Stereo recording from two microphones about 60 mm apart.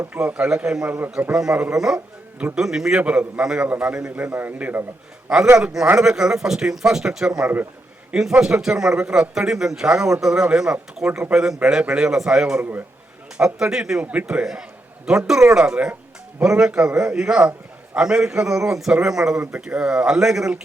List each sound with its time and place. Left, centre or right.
0.3 s speech: centre
0.9 s a man's voice: right
1.3 s speech: centre
3.0 s a man's voice: right
6.0 s speech: centre
14.0 s a man's voice: right
15.0 s speech: centre